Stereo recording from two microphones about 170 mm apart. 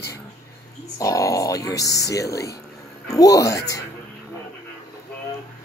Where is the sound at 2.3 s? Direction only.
70° left (ahead or behind).